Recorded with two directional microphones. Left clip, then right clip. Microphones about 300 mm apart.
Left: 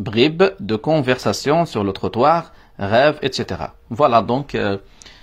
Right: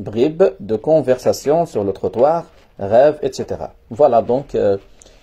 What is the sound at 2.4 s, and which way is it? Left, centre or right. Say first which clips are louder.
Speech: right 1 dB; left.